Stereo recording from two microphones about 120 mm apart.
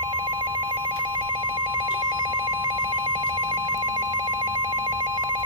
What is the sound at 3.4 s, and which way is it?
Telephone bell ringing, 30° right (ahead or behind).